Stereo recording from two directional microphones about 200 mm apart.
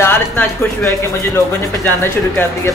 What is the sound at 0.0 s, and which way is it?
A man's voice, 10° left (ahead or behind).